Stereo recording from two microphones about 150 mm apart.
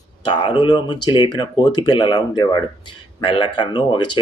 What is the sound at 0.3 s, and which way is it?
Speech, 35° left (ahead or behind).